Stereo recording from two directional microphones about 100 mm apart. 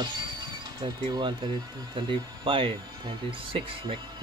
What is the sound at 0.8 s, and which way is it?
Speech, 50° right (ahead or behind).